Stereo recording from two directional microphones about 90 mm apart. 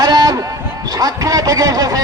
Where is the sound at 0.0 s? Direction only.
45° right (ahead or behind).